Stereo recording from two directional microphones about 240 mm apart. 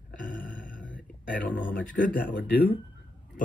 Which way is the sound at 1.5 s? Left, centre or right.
Left.